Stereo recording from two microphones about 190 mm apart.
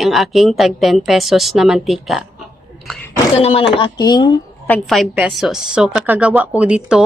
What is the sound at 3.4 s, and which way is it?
Speech, 30° left (ahead or behind).